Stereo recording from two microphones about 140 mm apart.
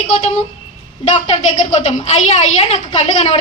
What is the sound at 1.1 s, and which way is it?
A woman's voice, 50° left (ahead or behind).